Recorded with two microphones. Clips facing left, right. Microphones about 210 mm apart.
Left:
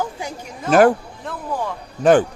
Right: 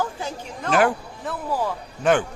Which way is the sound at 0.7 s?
45° left (ahead or behind).